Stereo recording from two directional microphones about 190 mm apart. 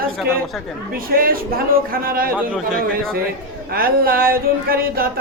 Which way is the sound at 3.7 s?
50° right (ahead or behind).